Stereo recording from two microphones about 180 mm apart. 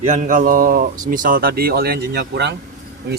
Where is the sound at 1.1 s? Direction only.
50° right (ahead or behind); by 2.5 s 65° right (ahead or behind).